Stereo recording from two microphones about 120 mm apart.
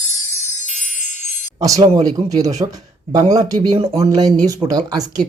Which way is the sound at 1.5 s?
30° right (ahead or behind).